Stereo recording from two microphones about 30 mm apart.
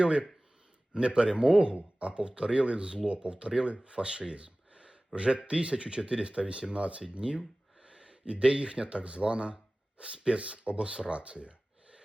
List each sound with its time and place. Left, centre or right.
0.0 s speech: right
1.7 s speech: right
2.1 s speech: right
7.2 s a sound: right
8.2 s speech: right